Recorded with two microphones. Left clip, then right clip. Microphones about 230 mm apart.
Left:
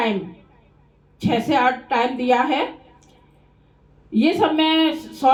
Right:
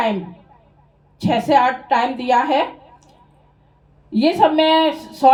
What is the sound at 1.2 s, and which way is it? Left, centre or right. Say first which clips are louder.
Speech: right 3 dB; right.